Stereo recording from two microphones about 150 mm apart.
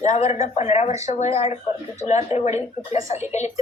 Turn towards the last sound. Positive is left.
turn(degrees=50)  # may be behind; listen again after turning